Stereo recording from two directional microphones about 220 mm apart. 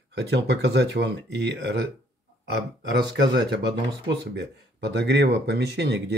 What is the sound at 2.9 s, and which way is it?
Speech, 50° right (ahead or behind).